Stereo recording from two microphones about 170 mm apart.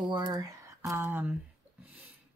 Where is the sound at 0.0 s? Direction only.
25° right (ahead or behind).